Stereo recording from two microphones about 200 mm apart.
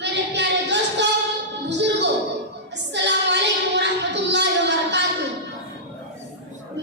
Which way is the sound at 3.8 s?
60° right (ahead or behind).